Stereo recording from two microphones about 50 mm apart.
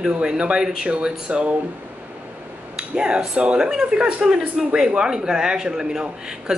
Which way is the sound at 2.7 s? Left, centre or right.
Centre.